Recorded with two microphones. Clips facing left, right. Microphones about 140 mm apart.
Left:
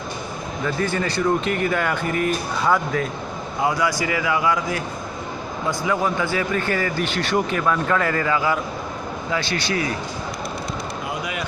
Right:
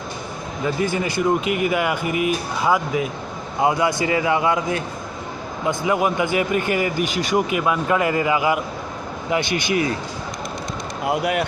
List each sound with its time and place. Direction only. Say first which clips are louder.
0.6 s speech: right 2 dB; 15° right (ahead or behind)
3.6 s a man's voice: right 3 dB; 25° right (ahead or behind)
11.0 s speech: right 11 dB; 65° right (ahead or behind)